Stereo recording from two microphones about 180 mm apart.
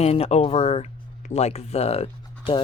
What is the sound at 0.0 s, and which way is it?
Speech, 35° left (ahead or behind).